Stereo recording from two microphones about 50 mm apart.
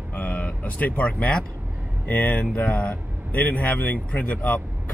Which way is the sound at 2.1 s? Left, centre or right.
Left.